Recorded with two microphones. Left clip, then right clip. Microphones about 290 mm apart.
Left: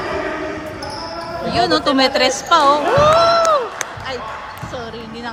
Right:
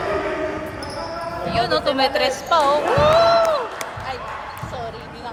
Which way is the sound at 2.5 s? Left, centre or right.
Left.